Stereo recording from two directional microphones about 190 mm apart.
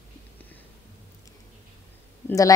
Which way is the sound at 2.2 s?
15° left (ahead or behind).